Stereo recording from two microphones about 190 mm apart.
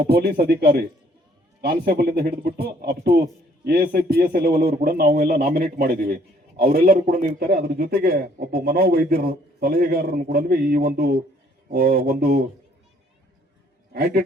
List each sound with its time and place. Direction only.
0.0 s a man's voice: 55° right (ahead or behind)
13.9 s speech: 55° right (ahead or behind)